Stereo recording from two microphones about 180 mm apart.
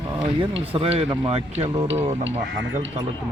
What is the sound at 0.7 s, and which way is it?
Speech, 30° right (ahead or behind).